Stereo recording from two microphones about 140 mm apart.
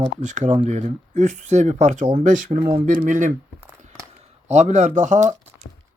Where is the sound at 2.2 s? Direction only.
70° right (ahead or behind).